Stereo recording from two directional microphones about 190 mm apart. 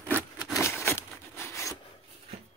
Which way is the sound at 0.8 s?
15° left (ahead or behind).